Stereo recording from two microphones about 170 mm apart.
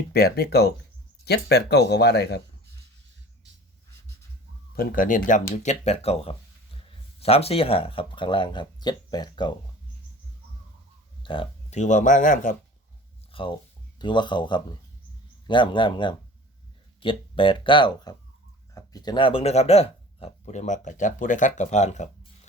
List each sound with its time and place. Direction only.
0.1 s speech: 65° left (ahead or behind)
4.8 s speech: 55° left (ahead or behind); by 9.5 s 25° left (ahead or behind)
11.2 s a sound: 30° left (ahead or behind)
11.8 s speech: 50° left (ahead or behind)
13.3 s speech: 30° left (ahead or behind)